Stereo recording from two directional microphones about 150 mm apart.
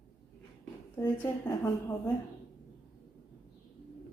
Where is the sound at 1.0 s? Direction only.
15° left (ahead or behind).